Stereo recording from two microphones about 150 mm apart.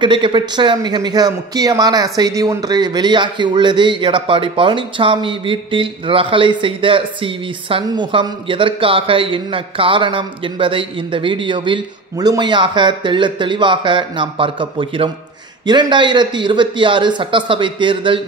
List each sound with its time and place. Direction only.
0.0 s a man's voice: 30° right (ahead or behind)